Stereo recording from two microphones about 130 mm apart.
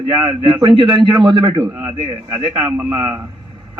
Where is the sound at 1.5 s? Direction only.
15° right (ahead or behind).